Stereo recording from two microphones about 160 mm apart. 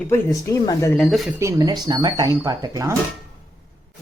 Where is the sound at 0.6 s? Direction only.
25° left (ahead or behind).